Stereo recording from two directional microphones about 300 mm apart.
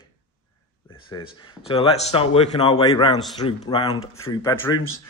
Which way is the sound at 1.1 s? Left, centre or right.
Centre.